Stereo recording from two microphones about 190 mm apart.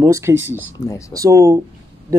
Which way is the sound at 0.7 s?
15° left (ahead or behind).